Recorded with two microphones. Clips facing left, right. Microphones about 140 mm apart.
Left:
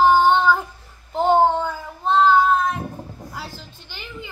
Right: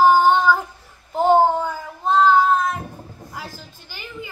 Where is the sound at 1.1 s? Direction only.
5° right (ahead or behind).